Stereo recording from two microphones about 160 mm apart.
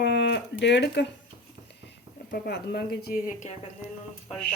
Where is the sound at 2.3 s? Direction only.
75° left (ahead or behind).